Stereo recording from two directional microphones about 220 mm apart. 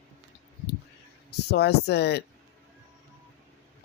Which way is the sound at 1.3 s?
50° left (ahead or behind).